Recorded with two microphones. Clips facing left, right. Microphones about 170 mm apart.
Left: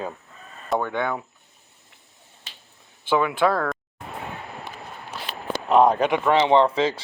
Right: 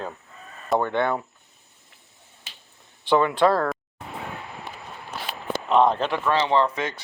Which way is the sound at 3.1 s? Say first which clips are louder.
Right 2 dB; 10° left (ahead or behind).